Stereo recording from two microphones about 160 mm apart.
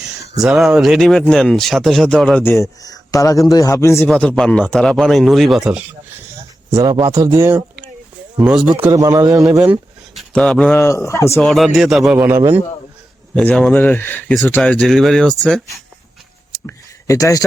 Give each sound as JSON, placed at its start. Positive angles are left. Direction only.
{"t": 0.4, "sound": "speech", "side_deg": -5}
{"t": 4.1, "sound": "speech", "side_deg": 5}
{"t": 6.7, "sound": "a man's voice", "side_deg": -20}
{"t": 8.8, "sound": "a man's voice", "side_deg": -20}
{"t": 10.2, "sound": "a sound", "side_deg": 5}
{"t": 10.8, "sound": "speech", "side_deg": 15}
{"t": 11.3, "sound": "speech", "side_deg": 0}
{"t": 12.4, "sound": "speech", "side_deg": -15}
{"t": 13.3, "sound": "speech", "side_deg": 5}
{"t": 16.5, "sound": "a sound", "side_deg": 20}